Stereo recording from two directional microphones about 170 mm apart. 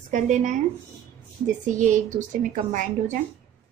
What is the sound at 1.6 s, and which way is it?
Speech, 50° right (ahead or behind).